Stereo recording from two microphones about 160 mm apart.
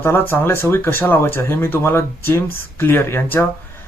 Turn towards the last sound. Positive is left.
turn(degrees=15)  # may be behind; listen again after turning